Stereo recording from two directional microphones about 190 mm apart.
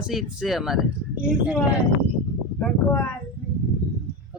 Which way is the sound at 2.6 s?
10° left (ahead or behind).